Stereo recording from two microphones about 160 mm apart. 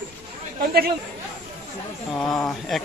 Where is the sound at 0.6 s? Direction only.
70° right (ahead or behind).